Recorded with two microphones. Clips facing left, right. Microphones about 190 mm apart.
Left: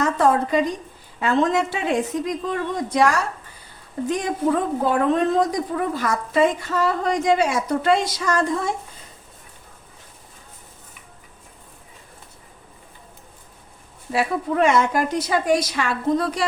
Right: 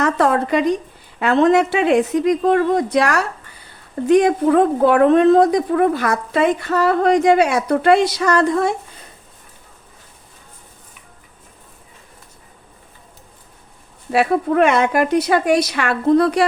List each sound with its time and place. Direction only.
0.0 s a woman's voice: 70° right (ahead or behind)
14.1 s speech: 65° right (ahead or behind)